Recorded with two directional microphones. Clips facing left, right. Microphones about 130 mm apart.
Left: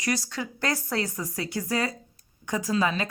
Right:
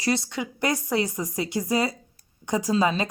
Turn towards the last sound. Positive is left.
turn(degrees=-25)  # may be behind; listen again after turning